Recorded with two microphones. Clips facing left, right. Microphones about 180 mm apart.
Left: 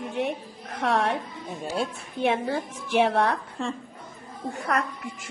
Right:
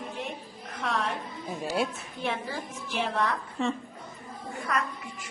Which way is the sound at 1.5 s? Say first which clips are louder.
Even; centre (ahead or behind).